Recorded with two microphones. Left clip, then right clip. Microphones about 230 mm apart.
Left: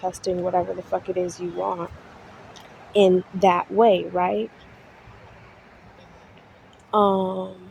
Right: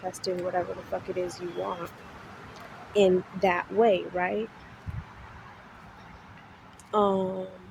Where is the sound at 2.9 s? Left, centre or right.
Left.